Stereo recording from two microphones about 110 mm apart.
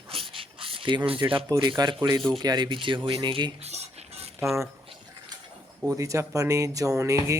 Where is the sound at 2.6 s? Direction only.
50° right (ahead or behind).